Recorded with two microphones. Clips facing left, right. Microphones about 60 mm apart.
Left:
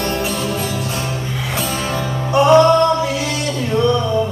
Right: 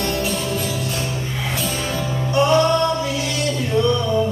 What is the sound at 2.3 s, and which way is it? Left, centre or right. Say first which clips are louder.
Music: left 6 dB; left.